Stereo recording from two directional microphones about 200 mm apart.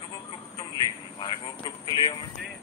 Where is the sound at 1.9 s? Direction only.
25° left (ahead or behind).